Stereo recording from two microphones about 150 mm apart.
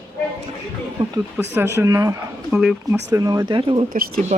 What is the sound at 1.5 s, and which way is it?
Speech, 15° right (ahead or behind).